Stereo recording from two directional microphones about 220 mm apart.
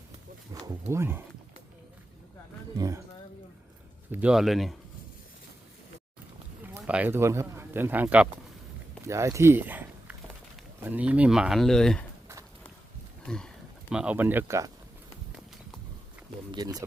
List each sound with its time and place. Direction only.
0.6 s speech: 15° right (ahead or behind)
2.7 s speech: 15° right (ahead or behind)
4.1 s speech: 5° right (ahead or behind)
6.8 s speech: 5° right (ahead or behind)
13.2 s a sound: 5° left (ahead or behind)
13.9 s speech: 5° right (ahead or behind)
16.5 s speech: 20° right (ahead or behind)